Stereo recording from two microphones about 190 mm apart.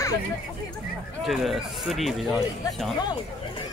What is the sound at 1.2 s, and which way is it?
Speech, centre (ahead or behind).